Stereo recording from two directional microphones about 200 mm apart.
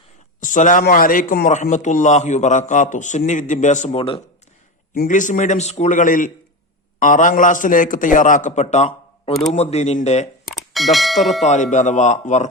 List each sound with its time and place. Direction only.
0.3 s a man's voice: 40° left (ahead or behind)
4.9 s a man's voice: 40° left (ahead or behind)
10.8 s speech: centre (ahead or behind)
11.4 s a man's voice: 35° left (ahead or behind)